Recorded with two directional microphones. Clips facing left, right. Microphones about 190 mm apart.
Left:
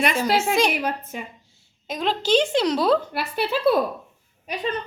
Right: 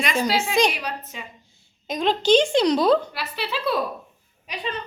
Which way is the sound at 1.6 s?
5° left (ahead or behind).